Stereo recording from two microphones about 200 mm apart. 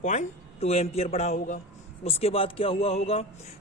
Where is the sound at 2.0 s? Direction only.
30° left (ahead or behind).